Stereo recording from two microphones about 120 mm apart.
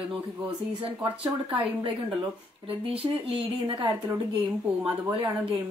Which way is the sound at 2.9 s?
50° right (ahead or behind).